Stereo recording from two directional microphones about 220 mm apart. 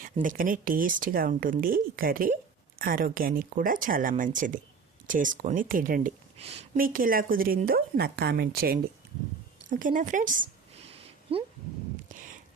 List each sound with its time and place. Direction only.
0.0 s speech: 35° right (ahead or behind)
6.7 s speech: 40° right (ahead or behind)
11.3 s speech: 25° right (ahead or behind)